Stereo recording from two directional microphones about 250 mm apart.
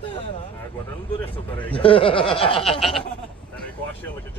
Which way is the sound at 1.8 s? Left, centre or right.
Left.